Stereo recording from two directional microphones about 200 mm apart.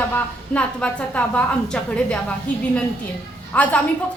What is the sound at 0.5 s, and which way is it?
A woman's voice, 5° left (ahead or behind).